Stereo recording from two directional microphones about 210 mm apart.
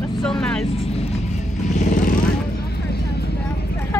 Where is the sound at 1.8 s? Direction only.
40° left (ahead or behind).